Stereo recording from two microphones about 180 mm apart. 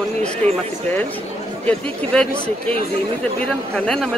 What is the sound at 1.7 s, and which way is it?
Speech, 5° left (ahead or behind).